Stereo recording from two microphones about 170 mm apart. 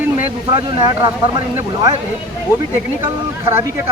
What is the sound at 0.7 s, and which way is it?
Speech, 25° right (ahead or behind).